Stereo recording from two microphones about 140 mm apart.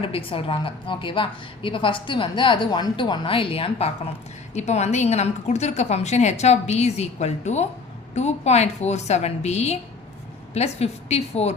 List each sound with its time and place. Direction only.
0.0 s a woman's voice: 40° left (ahead or behind)